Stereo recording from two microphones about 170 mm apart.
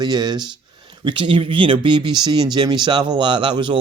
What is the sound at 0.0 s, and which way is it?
Speech, 25° right (ahead or behind).